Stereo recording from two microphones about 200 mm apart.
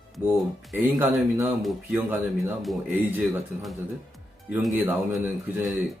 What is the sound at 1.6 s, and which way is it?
Speech, centre (ahead or behind).